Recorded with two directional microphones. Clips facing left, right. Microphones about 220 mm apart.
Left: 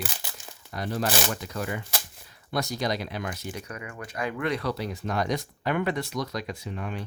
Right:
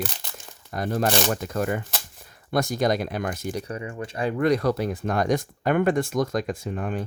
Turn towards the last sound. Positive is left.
turn(degrees=-45)  # may be behind; listen again after turning